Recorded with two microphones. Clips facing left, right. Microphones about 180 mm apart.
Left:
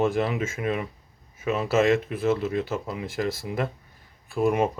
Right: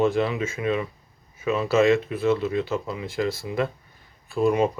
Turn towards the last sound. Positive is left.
turn(degrees=55)  # may be behind; listen again after turning